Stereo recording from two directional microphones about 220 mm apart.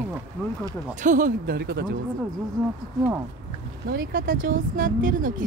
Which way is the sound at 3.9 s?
40° right (ahead or behind).